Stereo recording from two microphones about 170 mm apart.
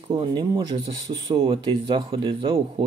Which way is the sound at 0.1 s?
30° right (ahead or behind).